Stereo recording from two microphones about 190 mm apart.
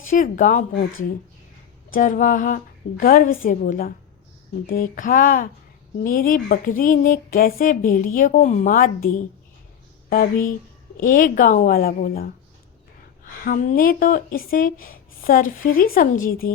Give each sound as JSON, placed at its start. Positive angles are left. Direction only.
{"t": 0.1, "sound": "a woman's voice", "side_deg": 45}
{"t": 0.7, "sound": "speech", "side_deg": 60}
{"t": 1.9, "sound": "a woman's voice", "side_deg": 45}
{"t": 10.1, "sound": "a woman's voice", "side_deg": 50}
{"t": 13.4, "sound": "a woman's voice", "side_deg": 45}